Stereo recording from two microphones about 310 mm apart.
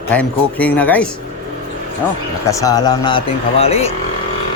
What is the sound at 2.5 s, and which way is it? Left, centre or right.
Speech, centre.